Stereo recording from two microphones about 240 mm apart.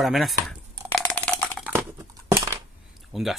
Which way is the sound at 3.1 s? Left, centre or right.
Centre.